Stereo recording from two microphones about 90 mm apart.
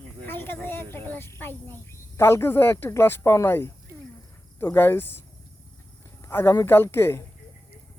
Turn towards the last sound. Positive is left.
turn(degrees=30)  # may be behind; listen again after turning